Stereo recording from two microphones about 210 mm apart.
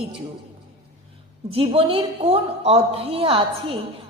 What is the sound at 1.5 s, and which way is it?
A woman's voice, 25° right (ahead or behind).